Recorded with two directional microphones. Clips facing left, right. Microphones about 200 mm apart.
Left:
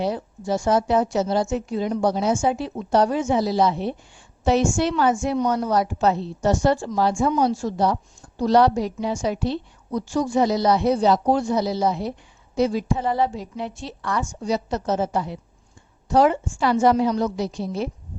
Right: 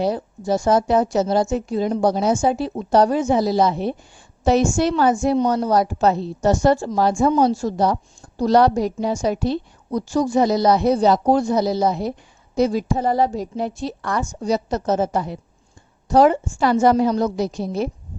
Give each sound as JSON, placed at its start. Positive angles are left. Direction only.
{"t": 0.0, "sound": "a woman's voice", "side_deg": -40}